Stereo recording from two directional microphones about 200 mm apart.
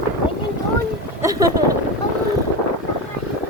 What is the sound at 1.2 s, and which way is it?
Boat, 20° right (ahead or behind).